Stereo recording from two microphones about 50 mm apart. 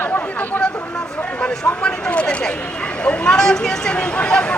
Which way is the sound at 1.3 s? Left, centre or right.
Left.